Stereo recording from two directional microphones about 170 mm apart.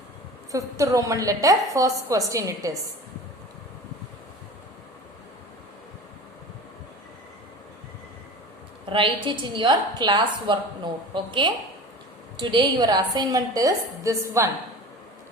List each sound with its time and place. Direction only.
0.5 s a woman's voice: 20° right (ahead or behind)
8.9 s a woman's voice: 30° right (ahead or behind)